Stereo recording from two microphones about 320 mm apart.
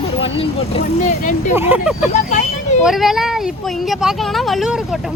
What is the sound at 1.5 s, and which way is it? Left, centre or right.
Speech, centre.